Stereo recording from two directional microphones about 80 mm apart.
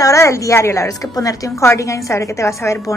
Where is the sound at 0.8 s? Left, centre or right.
Left.